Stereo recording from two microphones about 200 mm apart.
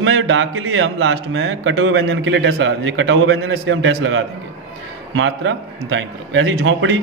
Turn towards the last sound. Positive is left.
turn(degrees=-70)  # may be behind; listen again after turning